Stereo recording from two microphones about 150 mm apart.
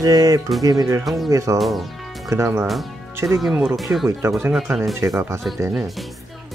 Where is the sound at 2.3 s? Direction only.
15° right (ahead or behind).